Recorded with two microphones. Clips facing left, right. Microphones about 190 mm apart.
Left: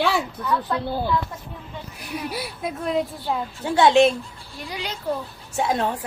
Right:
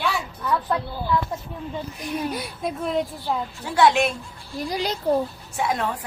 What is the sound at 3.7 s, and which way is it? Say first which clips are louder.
Speech: left 3 dB; 25° left (ahead or behind).